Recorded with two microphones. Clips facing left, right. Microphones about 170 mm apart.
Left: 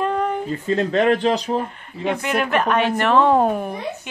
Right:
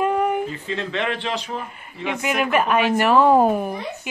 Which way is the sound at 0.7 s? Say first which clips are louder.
Left 8 dB; 40° left (ahead or behind).